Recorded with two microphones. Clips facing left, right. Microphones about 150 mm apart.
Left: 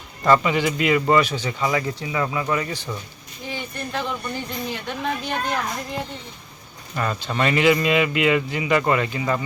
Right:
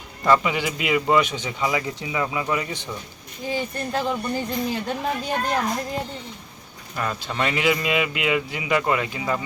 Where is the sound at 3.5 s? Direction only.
35° right (ahead or behind).